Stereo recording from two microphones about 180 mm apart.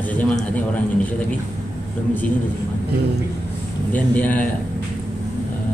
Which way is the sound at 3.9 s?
10° left (ahead or behind).